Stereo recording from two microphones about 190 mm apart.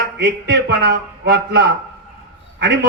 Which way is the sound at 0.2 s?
65° right (ahead or behind).